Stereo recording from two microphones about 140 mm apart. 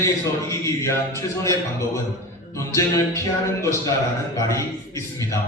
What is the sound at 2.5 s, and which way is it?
A man's voice, 20° left (ahead or behind).